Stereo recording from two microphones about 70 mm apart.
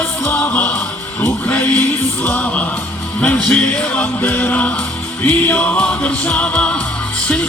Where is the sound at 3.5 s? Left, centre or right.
Left.